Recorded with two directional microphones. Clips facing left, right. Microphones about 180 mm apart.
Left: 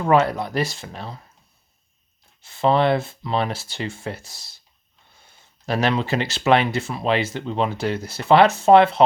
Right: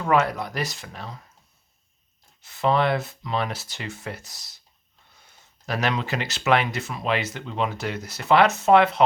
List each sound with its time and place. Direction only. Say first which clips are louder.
0.0 s speech: left 4 dB; 30° left (ahead or behind)
2.4 s speech: left 3 dB; 30° left (ahead or behind)